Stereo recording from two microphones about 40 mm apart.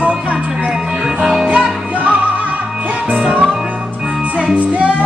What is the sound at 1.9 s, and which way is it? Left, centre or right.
Music, right.